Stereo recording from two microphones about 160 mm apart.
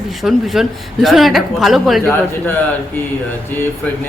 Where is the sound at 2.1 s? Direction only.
10° left (ahead or behind).